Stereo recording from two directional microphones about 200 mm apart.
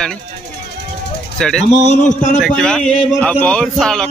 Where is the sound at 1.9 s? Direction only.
40° left (ahead or behind).